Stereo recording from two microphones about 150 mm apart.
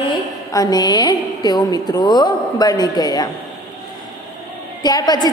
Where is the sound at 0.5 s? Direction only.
25° left (ahead or behind).